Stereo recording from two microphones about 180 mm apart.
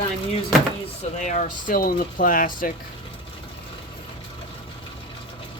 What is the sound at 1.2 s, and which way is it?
Speech, 40° left (ahead or behind).